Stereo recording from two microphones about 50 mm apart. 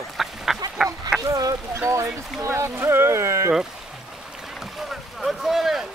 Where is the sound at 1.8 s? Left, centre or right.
Right.